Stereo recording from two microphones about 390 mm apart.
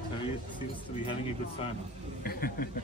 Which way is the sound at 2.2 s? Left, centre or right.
Left.